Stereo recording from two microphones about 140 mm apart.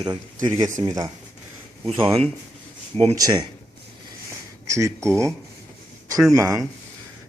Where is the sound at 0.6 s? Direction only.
35° right (ahead or behind).